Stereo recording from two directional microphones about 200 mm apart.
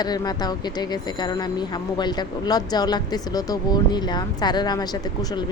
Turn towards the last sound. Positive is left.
turn(degrees=20)  # may be behind; listen again after turning